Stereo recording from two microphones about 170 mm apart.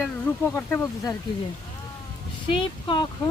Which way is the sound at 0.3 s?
10° left (ahead or behind).